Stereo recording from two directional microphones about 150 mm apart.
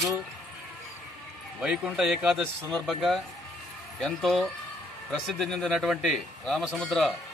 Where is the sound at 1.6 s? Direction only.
5° right (ahead or behind).